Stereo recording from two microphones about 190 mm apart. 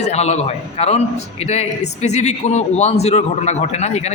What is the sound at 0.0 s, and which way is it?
A man's voice, 35° left (ahead or behind).